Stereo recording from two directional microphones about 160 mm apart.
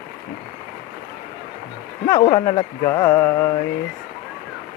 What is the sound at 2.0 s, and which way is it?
Music, 25° left (ahead or behind).